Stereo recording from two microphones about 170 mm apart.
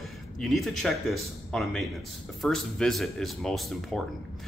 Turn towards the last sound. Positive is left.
turn(degrees=0)  # may be behind; listen again after turning